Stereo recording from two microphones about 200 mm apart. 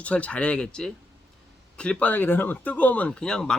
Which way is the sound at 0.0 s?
5° left (ahead or behind).